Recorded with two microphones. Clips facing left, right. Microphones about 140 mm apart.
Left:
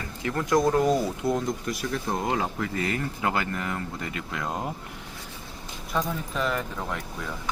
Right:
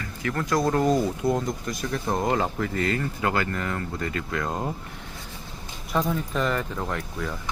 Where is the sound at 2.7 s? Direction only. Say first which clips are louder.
Right 2 dB; 15° left (ahead or behind).